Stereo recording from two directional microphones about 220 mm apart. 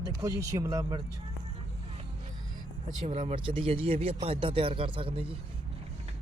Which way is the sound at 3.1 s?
25° right (ahead or behind).